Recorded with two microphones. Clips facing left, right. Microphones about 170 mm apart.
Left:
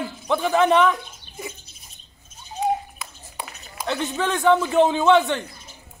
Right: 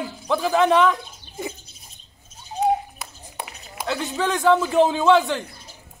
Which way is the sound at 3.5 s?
10° right (ahead or behind).